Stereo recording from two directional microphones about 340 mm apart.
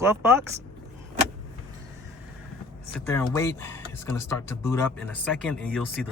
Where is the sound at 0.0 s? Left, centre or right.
Centre.